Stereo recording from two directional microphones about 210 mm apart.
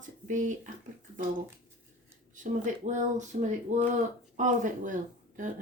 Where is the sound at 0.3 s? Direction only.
35° right (ahead or behind).